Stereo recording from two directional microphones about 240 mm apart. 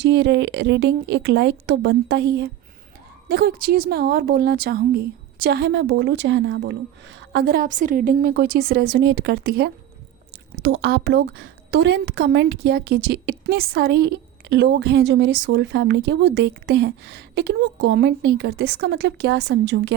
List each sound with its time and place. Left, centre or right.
0.0 s a woman's voice: right